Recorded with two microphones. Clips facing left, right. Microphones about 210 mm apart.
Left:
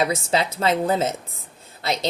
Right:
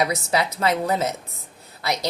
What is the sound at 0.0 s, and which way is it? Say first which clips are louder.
A woman's voice: left 1 dB; 25° left (ahead or behind).